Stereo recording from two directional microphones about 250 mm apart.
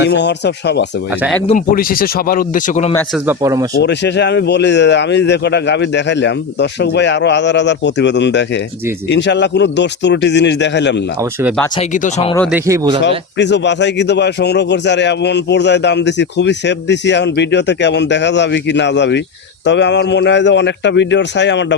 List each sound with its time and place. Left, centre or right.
0.0 s a man's voice: left
3.2 s speech: centre
3.8 s a man's voice: left
11.4 s speech: centre
11.8 s speech: left
12.5 s speech: centre
13.0 s a man's voice: left